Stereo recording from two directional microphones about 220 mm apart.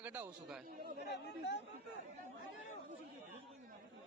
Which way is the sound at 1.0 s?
50° left (ahead or behind).